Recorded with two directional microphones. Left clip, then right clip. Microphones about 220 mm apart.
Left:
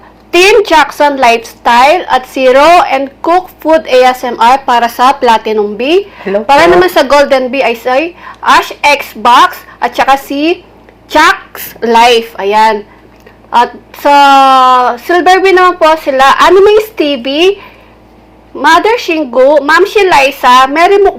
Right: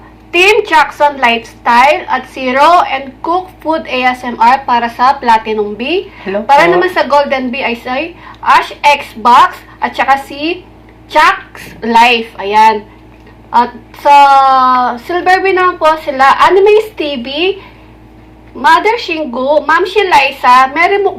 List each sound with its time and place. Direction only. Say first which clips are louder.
0.3 s a woman's voice: left 3 dB; 40° left (ahead or behind)
14.1 s speech: left 1 dB; 25° left (ahead or behind)
14.4 s a woman's voice: left 3 dB; 35° left (ahead or behind)
18.6 s a woman's voice: left 2 dB; 40° left (ahead or behind)